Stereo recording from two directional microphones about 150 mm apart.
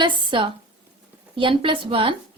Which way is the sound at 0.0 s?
35° right (ahead or behind).